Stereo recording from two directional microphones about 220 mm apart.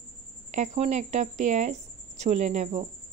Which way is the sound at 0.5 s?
30° right (ahead or behind).